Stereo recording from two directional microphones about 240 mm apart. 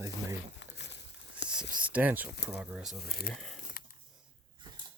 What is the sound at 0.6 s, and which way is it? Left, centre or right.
Crumpling, left.